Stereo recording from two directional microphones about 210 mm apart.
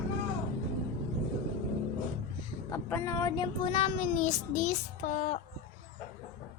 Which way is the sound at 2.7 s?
15° left (ahead or behind).